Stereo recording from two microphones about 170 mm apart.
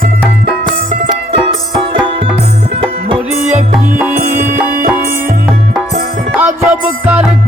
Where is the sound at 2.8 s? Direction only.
30° right (ahead or behind).